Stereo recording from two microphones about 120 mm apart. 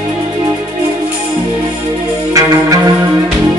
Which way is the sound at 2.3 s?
30° right (ahead or behind).